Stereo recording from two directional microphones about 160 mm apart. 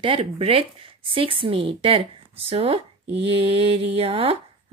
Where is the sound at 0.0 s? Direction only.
35° right (ahead or behind).